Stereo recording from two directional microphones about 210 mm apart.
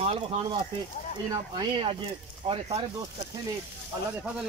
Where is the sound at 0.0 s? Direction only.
30° right (ahead or behind).